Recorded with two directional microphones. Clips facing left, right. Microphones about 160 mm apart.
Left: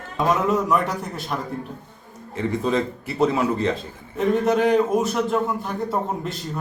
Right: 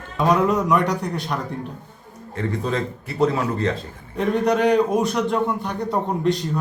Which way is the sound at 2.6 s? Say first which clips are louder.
Left 2 dB; 20° left (ahead or behind).